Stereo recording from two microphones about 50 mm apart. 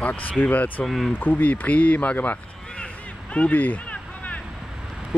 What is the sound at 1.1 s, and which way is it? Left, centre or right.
Speech, left.